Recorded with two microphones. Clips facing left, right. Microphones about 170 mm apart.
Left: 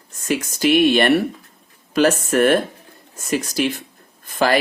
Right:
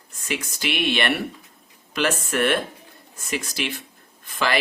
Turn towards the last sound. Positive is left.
turn(degrees=40)  # may be behind; listen again after turning